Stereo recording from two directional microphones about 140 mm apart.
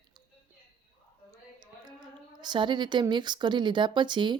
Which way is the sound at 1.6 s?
30° right (ahead or behind).